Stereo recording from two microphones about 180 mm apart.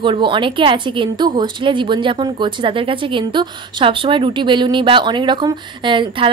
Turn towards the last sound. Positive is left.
turn(degrees=-25)  # may be behind; listen again after turning